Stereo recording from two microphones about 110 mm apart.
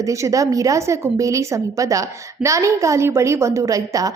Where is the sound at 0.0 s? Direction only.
30° right (ahead or behind).